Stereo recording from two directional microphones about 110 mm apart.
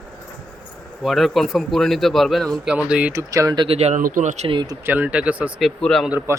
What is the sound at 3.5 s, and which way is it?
Speech, 65° right (ahead or behind).